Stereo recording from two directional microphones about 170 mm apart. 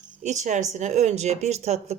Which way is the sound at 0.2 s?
45° right (ahead or behind).